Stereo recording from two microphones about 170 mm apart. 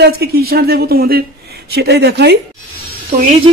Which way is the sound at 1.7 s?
85° right.